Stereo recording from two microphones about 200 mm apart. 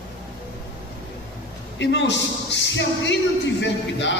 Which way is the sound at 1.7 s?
60° left (ahead or behind).